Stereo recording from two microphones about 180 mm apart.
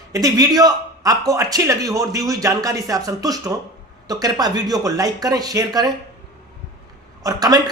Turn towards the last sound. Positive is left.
turn(degrees=-20)  # may be behind; listen again after turning